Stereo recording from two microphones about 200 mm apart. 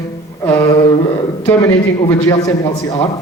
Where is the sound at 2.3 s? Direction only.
15° left (ahead or behind).